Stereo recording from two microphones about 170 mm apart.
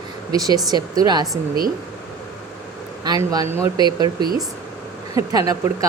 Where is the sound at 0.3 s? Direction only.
20° right (ahead or behind).